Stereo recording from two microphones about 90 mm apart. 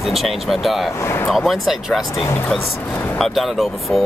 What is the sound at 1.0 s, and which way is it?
Speech, 30° left (ahead or behind).